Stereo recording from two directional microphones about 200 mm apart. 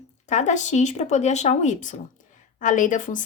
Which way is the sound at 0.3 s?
35° left (ahead or behind).